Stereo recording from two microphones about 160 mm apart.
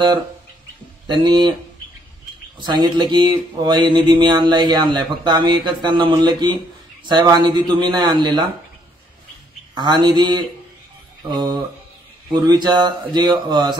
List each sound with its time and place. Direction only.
1.0 s speech: 30° right (ahead or behind)
2.6 s speech: 25° right (ahead or behind)
9.8 s speech: 30° right (ahead or behind)
11.3 s speech: 25° right (ahead or behind)